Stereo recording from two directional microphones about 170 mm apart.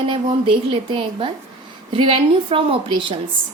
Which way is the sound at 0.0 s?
30° right (ahead or behind).